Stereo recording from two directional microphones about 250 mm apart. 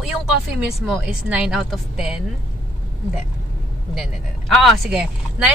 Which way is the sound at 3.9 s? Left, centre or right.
Centre.